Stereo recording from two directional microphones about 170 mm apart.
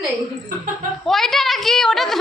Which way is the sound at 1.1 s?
Centre (ahead or behind).